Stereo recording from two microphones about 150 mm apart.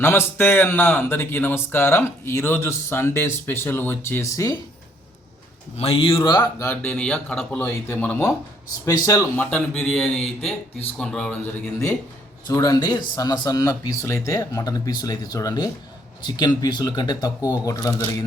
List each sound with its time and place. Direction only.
0.0 s speech: 15° left (ahead or behind)
5.7 s speech: 45° left (ahead or behind)
6.6 s speech: 15° left (ahead or behind)
8.8 s speech: 20° left (ahead or behind)
9.4 s a man's voice: 10° left (ahead or behind)
12.5 s speech: 25° left (ahead or behind)